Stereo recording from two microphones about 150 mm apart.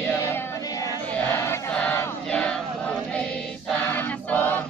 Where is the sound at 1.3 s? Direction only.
10° left (ahead or behind).